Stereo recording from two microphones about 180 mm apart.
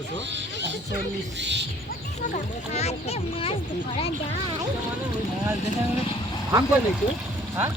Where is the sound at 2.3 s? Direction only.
35° left (ahead or behind).